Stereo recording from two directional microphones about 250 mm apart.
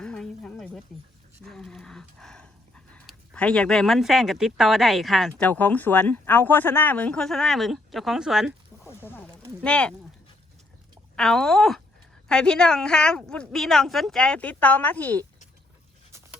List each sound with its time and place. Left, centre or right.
0.0 s a sound: centre
1.5 s speech: centre
8.9 s snake: centre
9.6 s speech: centre
11.2 s speech: centre